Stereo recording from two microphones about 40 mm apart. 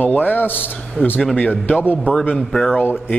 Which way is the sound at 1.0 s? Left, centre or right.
Left.